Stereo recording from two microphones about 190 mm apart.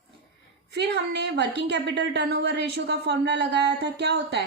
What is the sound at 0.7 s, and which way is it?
A woman's voice, 60° right (ahead or behind).